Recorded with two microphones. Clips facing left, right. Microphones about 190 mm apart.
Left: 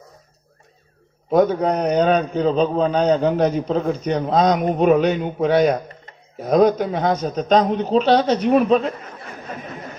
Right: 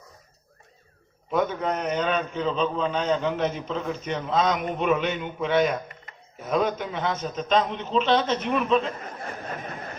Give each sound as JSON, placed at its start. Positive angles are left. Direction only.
{"t": 1.3, "sound": "a man's voice", "side_deg": 40}